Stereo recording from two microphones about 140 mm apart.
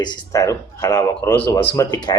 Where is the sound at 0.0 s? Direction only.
25° left (ahead or behind).